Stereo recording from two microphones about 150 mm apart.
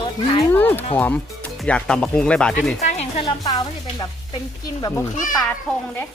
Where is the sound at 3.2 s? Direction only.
25° left (ahead or behind).